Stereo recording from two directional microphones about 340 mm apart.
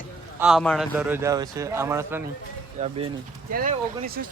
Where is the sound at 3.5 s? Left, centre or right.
Right.